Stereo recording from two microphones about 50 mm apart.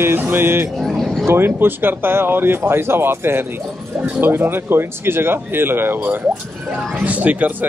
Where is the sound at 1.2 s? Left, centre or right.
Right.